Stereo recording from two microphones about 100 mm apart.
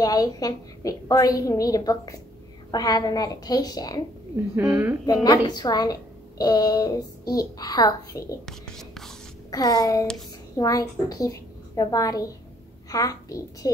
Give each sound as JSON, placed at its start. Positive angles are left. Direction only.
{"t": 0.0, "sound": "a woman's voice", "side_deg": 40}
{"t": 4.6, "sound": "a woman's voice", "side_deg": -20}
{"t": 5.0, "sound": "a woman's voice", "side_deg": 40}
{"t": 8.5, "sound": "speech", "side_deg": 5}
{"t": 9.5, "sound": "a woman's voice", "side_deg": 40}